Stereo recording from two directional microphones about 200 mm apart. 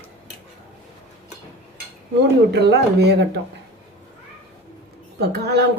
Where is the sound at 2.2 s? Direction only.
55° right (ahead or behind).